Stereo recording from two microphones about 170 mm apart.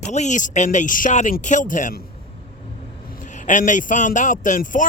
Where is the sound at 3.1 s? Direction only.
50° left (ahead or behind).